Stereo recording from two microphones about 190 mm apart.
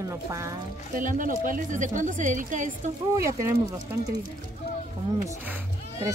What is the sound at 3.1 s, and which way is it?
Speech, 15° right (ahead or behind).